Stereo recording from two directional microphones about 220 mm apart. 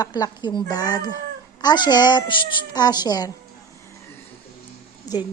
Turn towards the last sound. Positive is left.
turn(degrees=15)  # may be behind; listen again after turning